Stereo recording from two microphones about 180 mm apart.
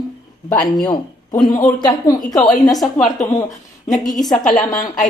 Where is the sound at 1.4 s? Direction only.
25° left (ahead or behind).